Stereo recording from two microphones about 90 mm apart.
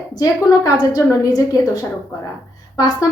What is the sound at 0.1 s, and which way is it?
A woman's voice, 40° left (ahead or behind).